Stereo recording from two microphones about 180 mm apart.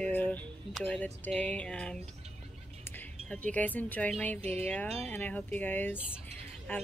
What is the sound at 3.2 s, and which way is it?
A woman's voice, 5° left (ahead or behind).